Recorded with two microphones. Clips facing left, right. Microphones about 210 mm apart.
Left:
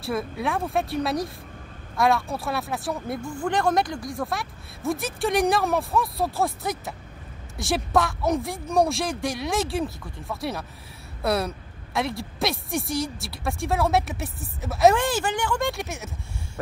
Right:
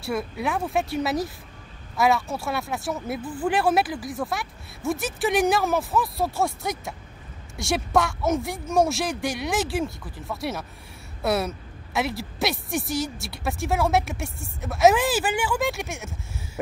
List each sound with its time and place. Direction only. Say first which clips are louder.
0.0 s speech: even; centre (ahead or behind)